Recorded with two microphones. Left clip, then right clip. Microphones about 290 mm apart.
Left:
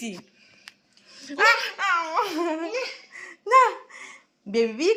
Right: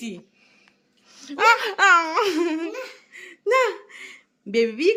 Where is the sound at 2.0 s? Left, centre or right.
Centre.